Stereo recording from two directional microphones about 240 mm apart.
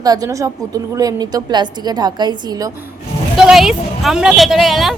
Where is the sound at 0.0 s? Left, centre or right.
Centre.